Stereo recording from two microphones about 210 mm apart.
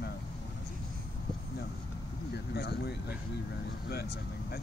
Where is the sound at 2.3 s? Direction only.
50° left (ahead or behind).